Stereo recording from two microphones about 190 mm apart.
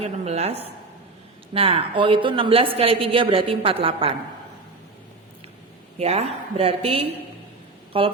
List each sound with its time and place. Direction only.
0.0 s a woman's voice: 35° right (ahead or behind)
6.0 s a woman's voice: 35° right (ahead or behind)